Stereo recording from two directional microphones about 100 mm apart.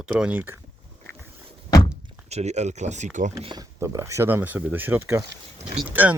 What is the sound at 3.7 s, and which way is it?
Speech, 30° right (ahead or behind).